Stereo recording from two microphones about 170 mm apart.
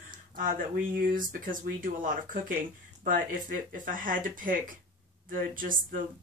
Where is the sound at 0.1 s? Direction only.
55° right (ahead or behind).